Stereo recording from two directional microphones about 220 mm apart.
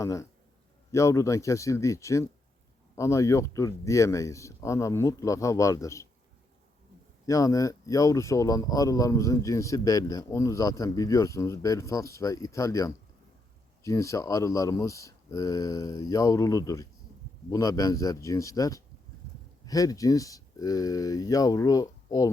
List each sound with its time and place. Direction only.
0.0 s speech: 15° left (ahead or behind)
7.3 s speech: 15° left (ahead or behind)